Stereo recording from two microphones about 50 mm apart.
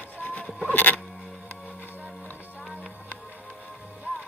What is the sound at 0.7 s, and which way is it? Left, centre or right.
Music, left.